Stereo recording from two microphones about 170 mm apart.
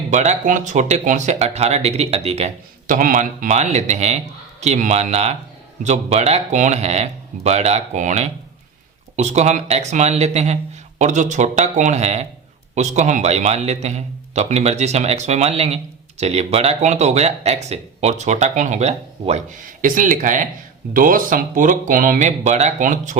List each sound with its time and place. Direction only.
0.1 s a man's voice: 45° right (ahead or behind)